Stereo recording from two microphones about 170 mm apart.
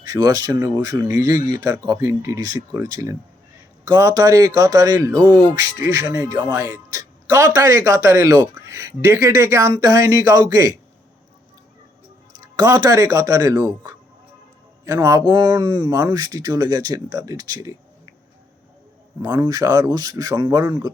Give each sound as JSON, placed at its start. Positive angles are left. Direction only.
{"t": 0.0, "sound": "speech", "side_deg": -20}
{"t": 12.5, "sound": "speech", "side_deg": -25}
{"t": 19.2, "sound": "speech", "side_deg": -20}